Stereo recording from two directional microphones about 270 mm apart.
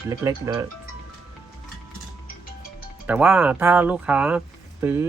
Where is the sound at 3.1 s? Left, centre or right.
Centre.